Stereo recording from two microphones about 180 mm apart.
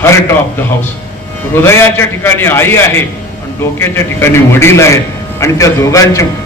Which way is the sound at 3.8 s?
15° left (ahead or behind).